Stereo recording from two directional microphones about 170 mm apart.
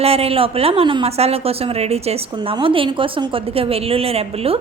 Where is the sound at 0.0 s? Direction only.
35° right (ahead or behind).